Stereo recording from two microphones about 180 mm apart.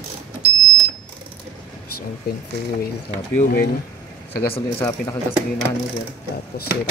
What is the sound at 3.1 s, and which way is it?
Cutlery, 50° left (ahead or behind).